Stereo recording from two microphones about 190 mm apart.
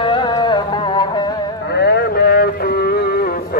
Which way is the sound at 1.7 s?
60° left (ahead or behind).